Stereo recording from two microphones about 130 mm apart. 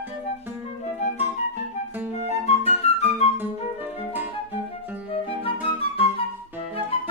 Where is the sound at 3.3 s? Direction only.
15° right (ahead or behind).